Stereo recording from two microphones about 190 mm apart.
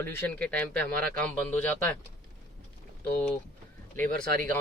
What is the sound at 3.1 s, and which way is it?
Speech, 5° left (ahead or behind).